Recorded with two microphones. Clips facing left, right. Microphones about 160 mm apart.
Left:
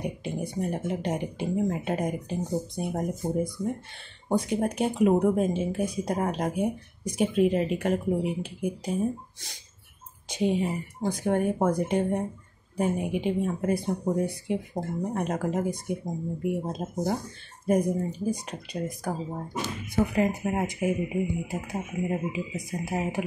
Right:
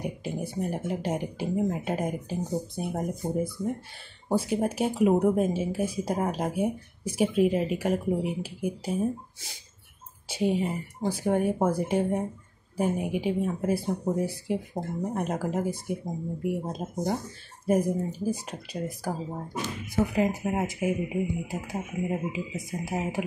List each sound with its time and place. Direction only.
0.0 s speech: 5° right (ahead or behind)
4.3 s speech: 5° right (ahead or behind)
10.2 s speech: 5° right (ahead or behind)